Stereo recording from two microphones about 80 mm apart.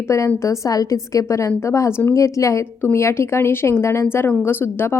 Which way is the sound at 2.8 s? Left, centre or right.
Left.